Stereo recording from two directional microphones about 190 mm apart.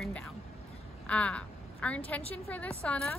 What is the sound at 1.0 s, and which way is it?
A woman's voice, 5° left (ahead or behind).